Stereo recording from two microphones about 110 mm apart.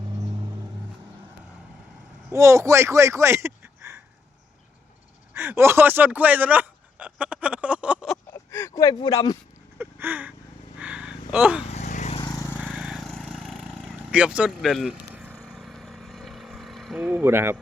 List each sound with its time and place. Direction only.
2.3 s speech: 25° right (ahead or behind)
5.3 s speech: 20° right (ahead or behind)
8.3 s speech: 25° left (ahead or behind)
9.7 s a sound: 20° right (ahead or behind)
11.7 s vehicle: 90° left
12.2 s vehicle: 35° left (ahead or behind)
12.5 s vehicle: 10° right (ahead or behind)
14.6 s speech: centre (ahead or behind)
15.4 s vehicle: centre (ahead or behind)
17.2 s speech: 20° right (ahead or behind)